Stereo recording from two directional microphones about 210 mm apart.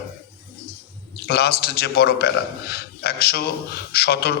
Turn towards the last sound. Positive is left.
turn(degrees=50)  # may be behind; listen again after turning